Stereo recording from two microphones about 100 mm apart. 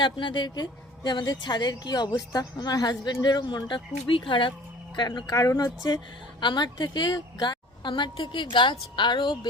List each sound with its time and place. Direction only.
0.0 s a woman's voice: 55° left (ahead or behind)